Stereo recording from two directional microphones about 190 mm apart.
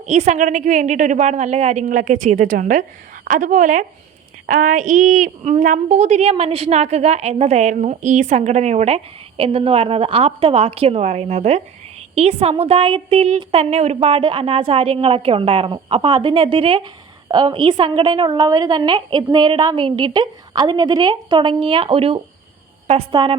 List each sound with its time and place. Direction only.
0.0 s a woman's voice: 35° right (ahead or behind)